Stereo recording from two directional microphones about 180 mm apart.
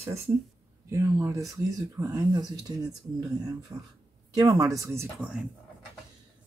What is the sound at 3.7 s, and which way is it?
Speech, 20° right (ahead or behind).